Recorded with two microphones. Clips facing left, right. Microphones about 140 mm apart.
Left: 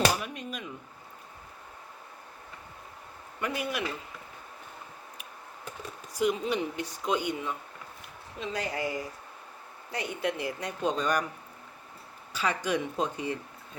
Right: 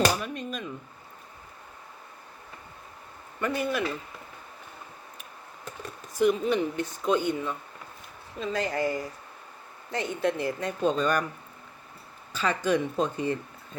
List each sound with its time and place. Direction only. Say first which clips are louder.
0.0 s speech: right 2 dB; 10° left (ahead or behind)
3.4 s speech: right 4 dB; 10° left (ahead or behind)
6.1 s speech: right 4 dB; 15° left (ahead or behind)
8.5 s speech: right 4 dB; 10° left (ahead or behind)
12.3 s speech: right 4 dB; 10° left (ahead or behind)